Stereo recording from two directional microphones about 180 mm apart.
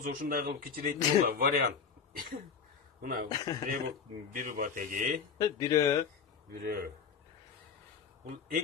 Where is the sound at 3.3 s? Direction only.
20° left (ahead or behind).